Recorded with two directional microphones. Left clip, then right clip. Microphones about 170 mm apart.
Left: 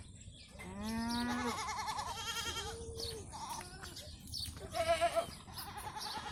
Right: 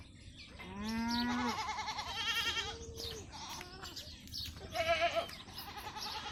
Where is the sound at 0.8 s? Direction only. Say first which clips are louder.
Right 2 dB; 50° left (ahead or behind).